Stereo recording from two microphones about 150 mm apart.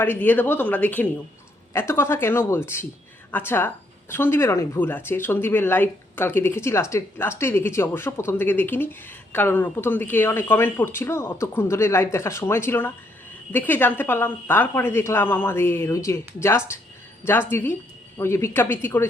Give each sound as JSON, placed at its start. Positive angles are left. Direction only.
{"t": 0.0, "sound": "speech", "side_deg": 10}